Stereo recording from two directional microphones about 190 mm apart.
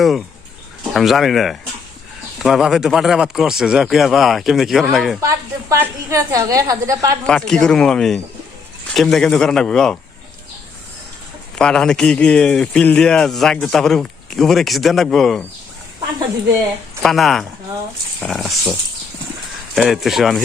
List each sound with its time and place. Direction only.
0.9 s a man's voice: centre (ahead or behind)
5.2 s a woman's voice: 15° right (ahead or behind)
7.3 s a man's voice: 5° left (ahead or behind)
11.5 s a man's voice: 5° left (ahead or behind)
17.0 s a man's voice: centre (ahead or behind)